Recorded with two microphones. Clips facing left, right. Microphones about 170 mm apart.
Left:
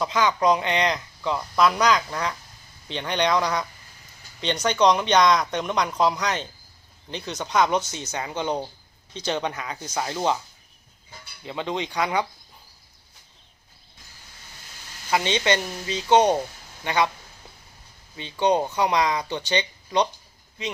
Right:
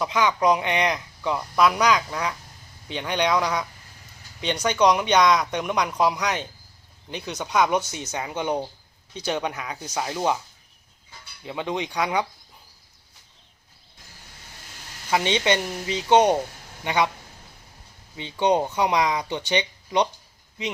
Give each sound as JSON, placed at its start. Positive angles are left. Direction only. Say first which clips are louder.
{"t": 0.0, "sound": "speech", "louder": "even", "side_deg": -10}
{"t": 11.4, "sound": "speech", "louder": "even", "side_deg": -15}
{"t": 15.1, "sound": "speech", "louder": "right 1 dB", "side_deg": -15}
{"t": 18.2, "sound": "speech", "louder": "even", "side_deg": -20}